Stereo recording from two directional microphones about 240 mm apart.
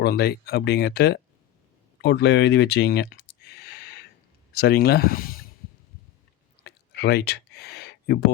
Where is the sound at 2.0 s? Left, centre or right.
Left.